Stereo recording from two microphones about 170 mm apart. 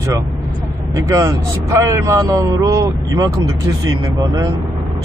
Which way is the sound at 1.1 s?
20° right (ahead or behind).